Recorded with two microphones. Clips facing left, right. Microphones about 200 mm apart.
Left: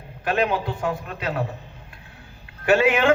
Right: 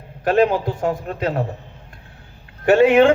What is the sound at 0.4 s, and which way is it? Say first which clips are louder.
Speech: right 5 dB; 45° right (ahead or behind).